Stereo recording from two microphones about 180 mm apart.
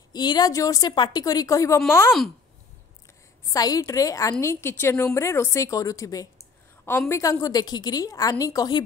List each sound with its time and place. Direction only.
0.1 s a woman's voice: 25° left (ahead or behind)
3.4 s a woman's voice: 20° left (ahead or behind)